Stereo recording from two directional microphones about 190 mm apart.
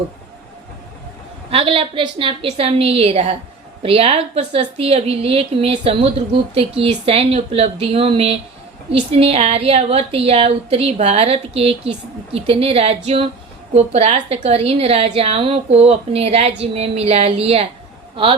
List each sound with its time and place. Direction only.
1.5 s a woman's voice: 30° right (ahead or behind)